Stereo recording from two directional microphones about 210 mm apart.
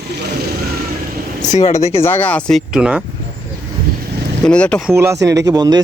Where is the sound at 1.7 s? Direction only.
15° left (ahead or behind); by 3.0 s 5° right (ahead or behind).